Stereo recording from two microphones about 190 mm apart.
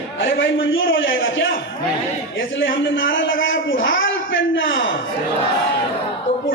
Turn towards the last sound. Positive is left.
turn(degrees=85)